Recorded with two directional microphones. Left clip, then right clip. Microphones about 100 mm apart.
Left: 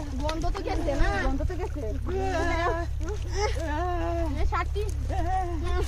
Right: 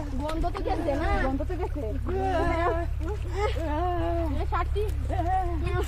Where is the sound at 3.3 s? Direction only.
15° right (ahead or behind).